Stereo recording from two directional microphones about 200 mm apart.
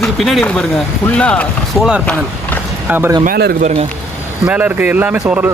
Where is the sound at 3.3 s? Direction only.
50° right (ahead or behind).